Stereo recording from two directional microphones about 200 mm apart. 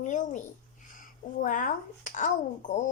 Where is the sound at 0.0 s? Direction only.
40° left (ahead or behind).